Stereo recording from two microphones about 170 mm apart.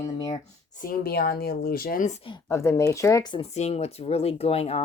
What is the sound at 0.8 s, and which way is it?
Speech, 60° left (ahead or behind).